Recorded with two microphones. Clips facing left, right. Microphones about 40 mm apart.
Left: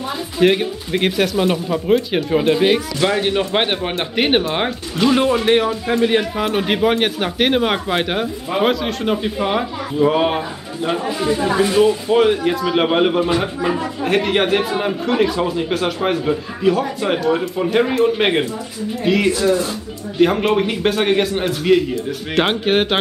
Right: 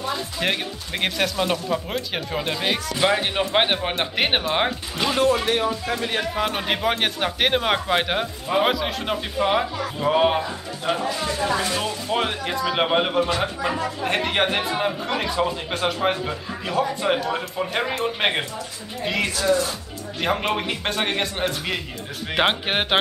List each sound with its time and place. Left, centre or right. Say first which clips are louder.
0.0 s speech: left 8 dB; centre
3.0 s speech: left 3 dB; centre
5.1 s speech: left 4 dB; centre
6.2 s speech: left 5 dB; centre
12.2 s speech: left 8 dB; centre